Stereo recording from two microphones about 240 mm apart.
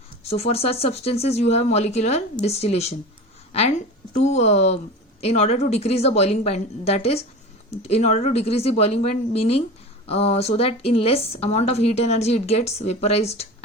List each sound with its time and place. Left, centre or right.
0.3 s a woman's voice: left
4.2 s a woman's voice: left